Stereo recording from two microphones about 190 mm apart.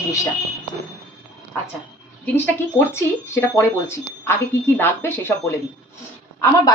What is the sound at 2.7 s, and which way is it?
A woman's voice, 15° left (ahead or behind).